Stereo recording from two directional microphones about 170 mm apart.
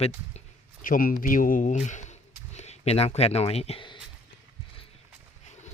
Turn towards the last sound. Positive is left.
turn(degrees=30)  # may be behind; listen again after turning